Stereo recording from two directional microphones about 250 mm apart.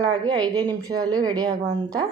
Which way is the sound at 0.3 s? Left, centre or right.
Centre.